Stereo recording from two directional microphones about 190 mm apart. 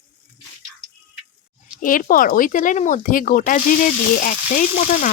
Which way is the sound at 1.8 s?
45° left (ahead or behind).